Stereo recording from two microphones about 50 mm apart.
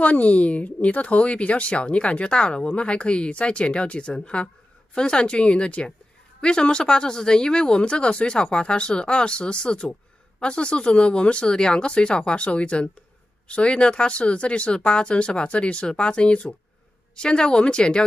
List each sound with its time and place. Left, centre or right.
0.0 s speech: left